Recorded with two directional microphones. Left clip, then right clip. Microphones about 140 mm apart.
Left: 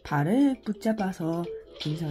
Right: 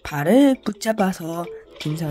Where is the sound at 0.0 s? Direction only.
40° right (ahead or behind).